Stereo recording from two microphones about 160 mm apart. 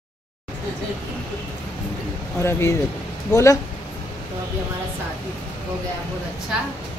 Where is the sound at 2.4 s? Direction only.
15° left (ahead or behind).